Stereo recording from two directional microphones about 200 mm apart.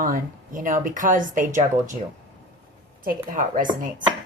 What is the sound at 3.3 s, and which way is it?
Speech, 45° right (ahead or behind).